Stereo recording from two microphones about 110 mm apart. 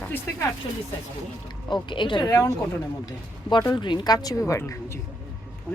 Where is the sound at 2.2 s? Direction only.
30° left (ahead or behind).